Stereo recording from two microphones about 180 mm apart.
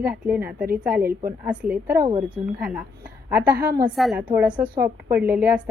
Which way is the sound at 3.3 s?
10° right (ahead or behind).